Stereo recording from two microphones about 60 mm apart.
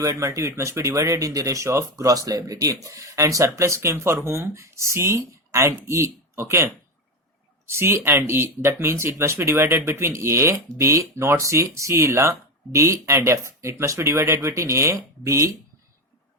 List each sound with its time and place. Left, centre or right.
0.0 s speech: right
2.0 s speech: right
7.7 s speech: right